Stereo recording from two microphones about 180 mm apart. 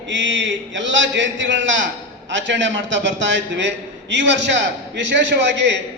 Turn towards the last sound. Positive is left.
turn(degrees=-75)  # may be behind; listen again after turning